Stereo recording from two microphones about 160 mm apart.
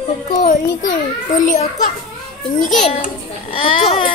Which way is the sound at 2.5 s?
Centre (ahead or behind).